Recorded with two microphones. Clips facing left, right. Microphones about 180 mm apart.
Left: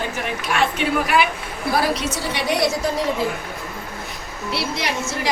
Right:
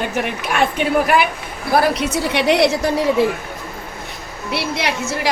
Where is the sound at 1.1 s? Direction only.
55° right (ahead or behind); by 2.9 s 70° right (ahead or behind).